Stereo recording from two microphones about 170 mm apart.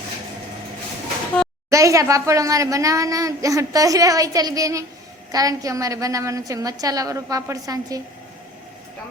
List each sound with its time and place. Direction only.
1.7 s a woman's voice: 20° right (ahead or behind)